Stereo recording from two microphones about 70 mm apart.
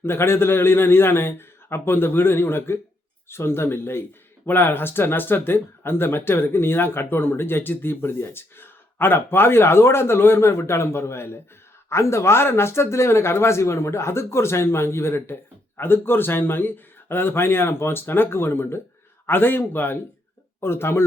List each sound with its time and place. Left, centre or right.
0.0 s speech: left